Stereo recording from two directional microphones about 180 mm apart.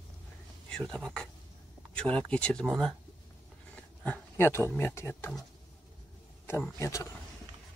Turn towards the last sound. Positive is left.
turn(degrees=15)  # may be behind; listen again after turning